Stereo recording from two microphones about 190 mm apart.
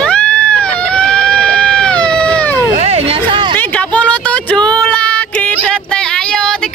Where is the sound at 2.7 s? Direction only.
35° right (ahead or behind).